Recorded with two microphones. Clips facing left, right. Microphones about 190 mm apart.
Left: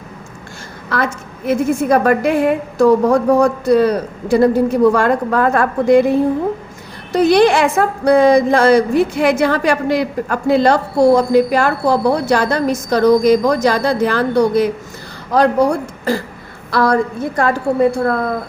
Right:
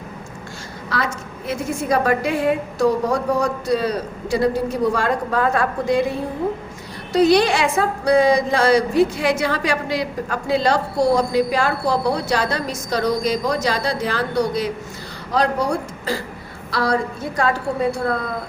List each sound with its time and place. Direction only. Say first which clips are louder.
0.9 s a woman's voice: left 5 dB; 55° left (ahead or behind)